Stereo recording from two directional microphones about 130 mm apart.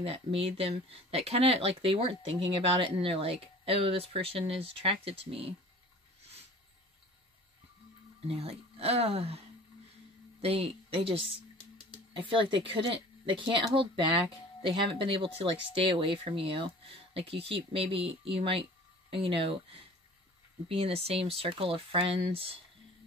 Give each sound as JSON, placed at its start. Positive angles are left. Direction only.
{"t": 0.0, "sound": "speech", "side_deg": -50}
{"t": 8.3, "sound": "speech", "side_deg": -50}
{"t": 10.4, "sound": "speech", "side_deg": -50}